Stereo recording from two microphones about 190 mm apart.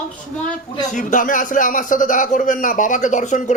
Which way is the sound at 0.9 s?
40° left (ahead or behind).